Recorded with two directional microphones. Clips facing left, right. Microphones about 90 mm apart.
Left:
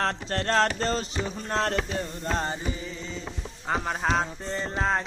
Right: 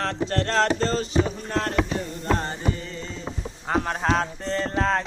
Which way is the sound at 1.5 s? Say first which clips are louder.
Right 1 dB; 30° left (ahead or behind).